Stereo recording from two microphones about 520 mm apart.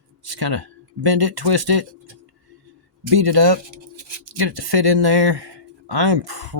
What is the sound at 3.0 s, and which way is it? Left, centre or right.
Speech, right.